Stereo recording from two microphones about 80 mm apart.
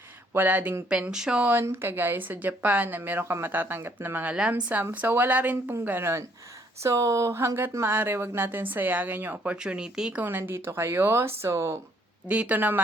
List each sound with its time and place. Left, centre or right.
0.3 s speech: right
1.4 s speech: right
6.8 s speech: right
8.4 s speech: right
10.2 s speech: right
12.3 s speech: centre